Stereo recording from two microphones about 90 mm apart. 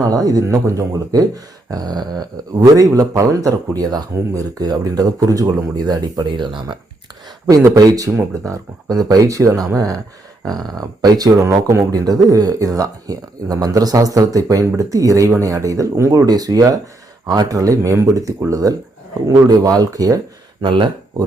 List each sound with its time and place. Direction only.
0.0 s speech: 40° right (ahead or behind); by 6.7 s 60° right (ahead or behind)
7.6 s speech: 40° right (ahead or behind)
20.7 s speech: 65° right (ahead or behind)